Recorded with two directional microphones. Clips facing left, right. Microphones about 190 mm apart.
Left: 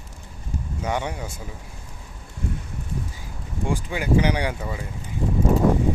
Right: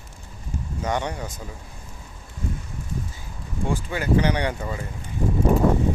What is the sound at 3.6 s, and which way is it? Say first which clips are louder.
Speech: even; 15° left (ahead or behind).